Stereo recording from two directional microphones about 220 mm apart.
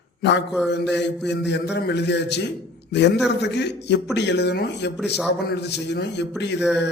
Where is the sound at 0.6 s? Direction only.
50° left (ahead or behind).